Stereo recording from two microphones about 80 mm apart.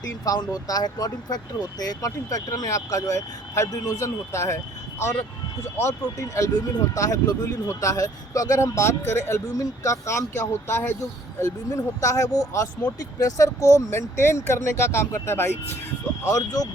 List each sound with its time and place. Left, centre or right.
0.3 s speech: left
16.2 s speech: left